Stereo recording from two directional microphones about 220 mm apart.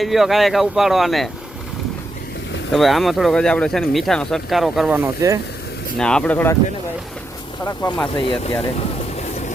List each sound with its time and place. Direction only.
0.0 s speech: centre (ahead or behind)
2.7 s speech: centre (ahead or behind)
6.0 s speech: 5° left (ahead or behind)
7.6 s speech: 10° left (ahead or behind)
8.1 s speech: 25° left (ahead or behind)